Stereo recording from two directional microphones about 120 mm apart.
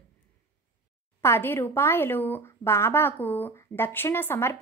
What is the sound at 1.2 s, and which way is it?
Speech, 20° left (ahead or behind).